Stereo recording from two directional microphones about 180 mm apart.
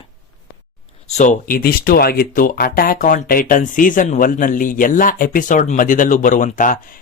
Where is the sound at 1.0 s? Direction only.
40° left (ahead or behind).